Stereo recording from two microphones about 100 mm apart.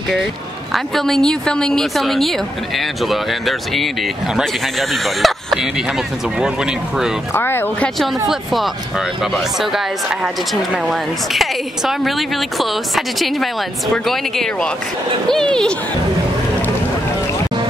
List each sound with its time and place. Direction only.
0.7 s speech: 5° left (ahead or behind)
7.3 s speech: 20° left (ahead or behind)
8.3 s speech: centre (ahead or behind)